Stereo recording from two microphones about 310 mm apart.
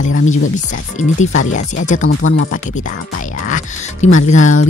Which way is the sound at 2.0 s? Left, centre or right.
Left.